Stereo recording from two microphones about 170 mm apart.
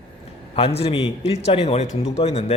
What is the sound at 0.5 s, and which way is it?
A man's voice, 35° left (ahead or behind).